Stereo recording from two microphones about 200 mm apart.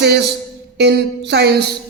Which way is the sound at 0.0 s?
60° right (ahead or behind).